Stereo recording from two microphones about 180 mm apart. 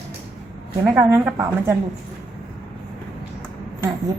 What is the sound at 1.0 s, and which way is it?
Speech, 15° right (ahead or behind).